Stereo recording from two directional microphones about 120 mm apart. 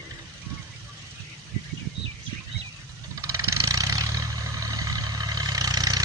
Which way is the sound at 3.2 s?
25° right (ahead or behind).